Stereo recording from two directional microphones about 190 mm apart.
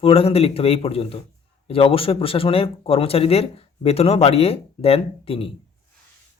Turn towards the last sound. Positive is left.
turn(degrees=30)  # may be behind; listen again after turning